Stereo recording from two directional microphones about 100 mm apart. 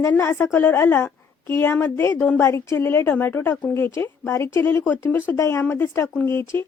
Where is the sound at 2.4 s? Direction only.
30° left (ahead or behind).